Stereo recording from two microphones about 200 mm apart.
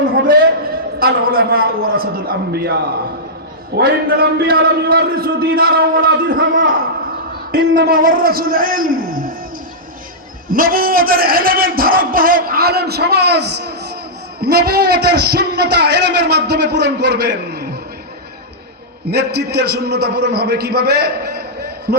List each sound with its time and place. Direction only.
0.1 s a sound: 50° right (ahead or behind)
0.9 s a man's voice: 50° right (ahead or behind)
3.8 s a man's voice: 50° right (ahead or behind)
7.5 s a man's voice: 50° right (ahead or behind)
10.5 s a man's voice: 45° right (ahead or behind)
19.0 s a man's voice: 55° right (ahead or behind)